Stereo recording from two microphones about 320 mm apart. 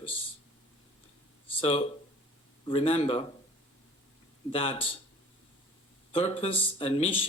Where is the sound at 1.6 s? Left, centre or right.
Centre.